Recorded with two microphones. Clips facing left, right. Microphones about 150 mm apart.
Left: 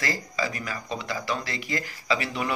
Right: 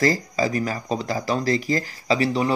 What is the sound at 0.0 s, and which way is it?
Speech, 40° right (ahead or behind).